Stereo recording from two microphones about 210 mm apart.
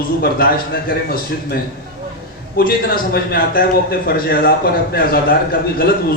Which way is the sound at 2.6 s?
45° left (ahead or behind).